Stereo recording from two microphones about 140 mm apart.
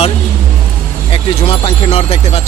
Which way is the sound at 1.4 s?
40° left (ahead or behind).